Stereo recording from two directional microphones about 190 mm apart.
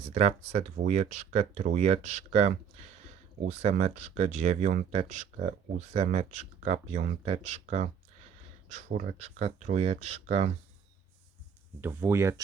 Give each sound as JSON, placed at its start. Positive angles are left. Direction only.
{"t": 0.0, "sound": "speech", "side_deg": -35}
{"t": 11.8, "sound": "speech", "side_deg": -10}